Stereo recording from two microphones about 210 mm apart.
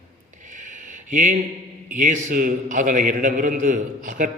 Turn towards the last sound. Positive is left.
turn(degrees=-35)  # may be behind; listen again after turning